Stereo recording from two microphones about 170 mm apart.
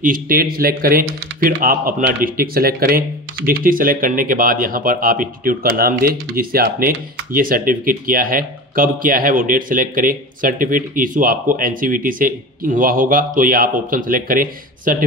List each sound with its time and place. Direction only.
0.0 s speech: 55° right (ahead or behind)